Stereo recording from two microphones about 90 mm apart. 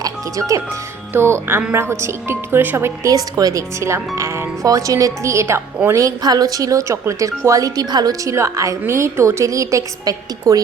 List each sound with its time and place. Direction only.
0.0 s music: 40° right (ahead or behind)
1.1 s speech: 25° right (ahead or behind)
3.1 s speech: 40° right (ahead or behind); by 6.0 s 25° right (ahead or behind)
6.0 s speech: 40° right (ahead or behind)